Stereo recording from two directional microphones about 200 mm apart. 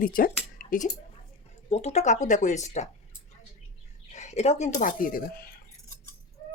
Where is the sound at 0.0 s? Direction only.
45° left (ahead or behind).